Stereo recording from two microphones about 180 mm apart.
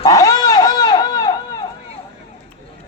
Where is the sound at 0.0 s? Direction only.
20° left (ahead or behind).